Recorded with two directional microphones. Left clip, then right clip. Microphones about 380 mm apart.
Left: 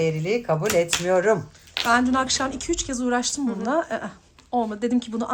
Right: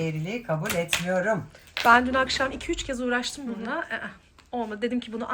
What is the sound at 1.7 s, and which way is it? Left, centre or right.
Speech, centre.